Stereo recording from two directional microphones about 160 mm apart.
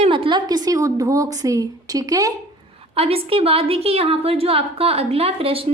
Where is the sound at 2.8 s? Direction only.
35° right (ahead or behind).